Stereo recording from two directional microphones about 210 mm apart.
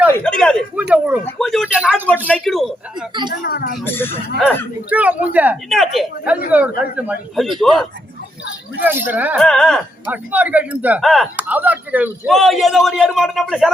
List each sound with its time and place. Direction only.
0.1 s speech: 5° left (ahead or behind)
3.4 s speech: 45° left (ahead or behind)
3.8 s speech: 10° left (ahead or behind)
4.9 s speech: 5° right (ahead or behind)
8.8 s speech: 10° right (ahead or behind)